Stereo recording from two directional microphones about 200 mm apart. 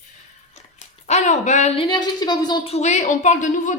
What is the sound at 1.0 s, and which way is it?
A woman's voice, 35° left (ahead or behind).